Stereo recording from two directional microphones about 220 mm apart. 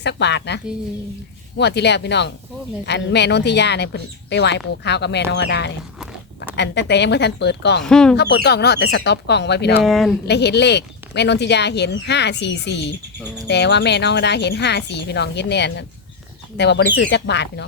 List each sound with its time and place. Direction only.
0.0 s speech: 50° left (ahead or behind)
7.9 s speech: 5° left (ahead or behind)
8.1 s speech: 50° left (ahead or behind)
9.8 s speech: centre (ahead or behind)
10.2 s speech: 50° left (ahead or behind)